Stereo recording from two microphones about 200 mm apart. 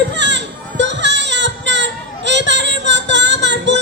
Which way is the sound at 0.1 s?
60° right (ahead or behind).